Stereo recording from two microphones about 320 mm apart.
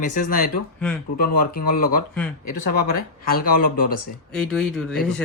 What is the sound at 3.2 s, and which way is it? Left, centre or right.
Speech, left.